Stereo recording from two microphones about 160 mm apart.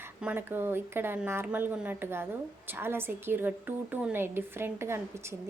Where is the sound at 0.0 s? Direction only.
10° right (ahead or behind).